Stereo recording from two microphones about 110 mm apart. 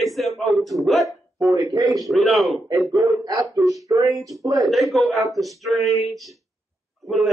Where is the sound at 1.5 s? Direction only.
35° right (ahead or behind).